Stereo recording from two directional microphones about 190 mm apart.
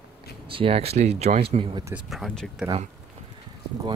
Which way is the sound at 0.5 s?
30° right (ahead or behind).